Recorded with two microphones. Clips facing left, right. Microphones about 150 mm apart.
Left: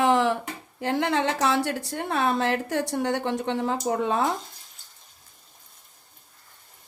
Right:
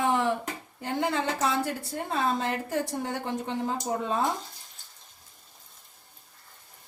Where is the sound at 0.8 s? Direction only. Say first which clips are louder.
Left 4 dB; 85° left.